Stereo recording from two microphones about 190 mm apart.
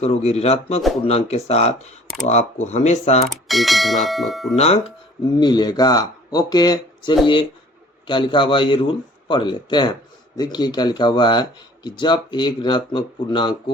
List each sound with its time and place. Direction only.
0.0 s speech: 35° left (ahead or behind)
3.2 s bell: centre (ahead or behind)
4.5 s speech: 35° left (ahead or behind)
5.4 s a man's voice: 20° left (ahead or behind)